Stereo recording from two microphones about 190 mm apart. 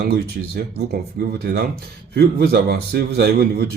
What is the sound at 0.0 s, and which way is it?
A man's voice, 55° right (ahead or behind).